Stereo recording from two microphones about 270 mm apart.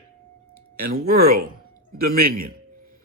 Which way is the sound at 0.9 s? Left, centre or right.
Right.